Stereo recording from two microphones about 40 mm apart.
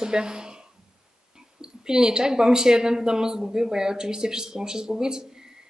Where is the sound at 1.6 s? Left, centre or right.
Centre.